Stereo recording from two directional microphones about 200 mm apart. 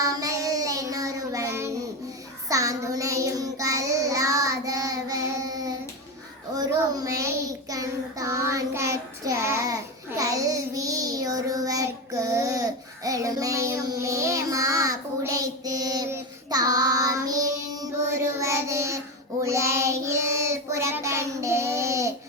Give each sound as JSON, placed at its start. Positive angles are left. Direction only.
{"t": 0.0, "sound": "child singing", "side_deg": -15}